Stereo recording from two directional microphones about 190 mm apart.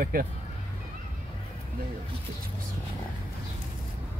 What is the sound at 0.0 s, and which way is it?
Speech, 50° right (ahead or behind).